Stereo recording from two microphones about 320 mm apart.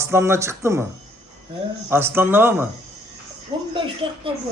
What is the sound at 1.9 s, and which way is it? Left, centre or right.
Speech, centre.